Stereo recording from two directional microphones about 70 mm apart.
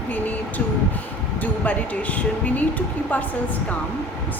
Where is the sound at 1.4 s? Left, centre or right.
Left.